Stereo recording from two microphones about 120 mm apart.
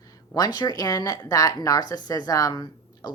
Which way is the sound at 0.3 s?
35° left (ahead or behind).